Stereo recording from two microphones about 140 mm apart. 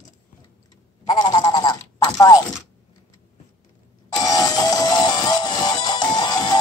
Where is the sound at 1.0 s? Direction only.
30° left (ahead or behind).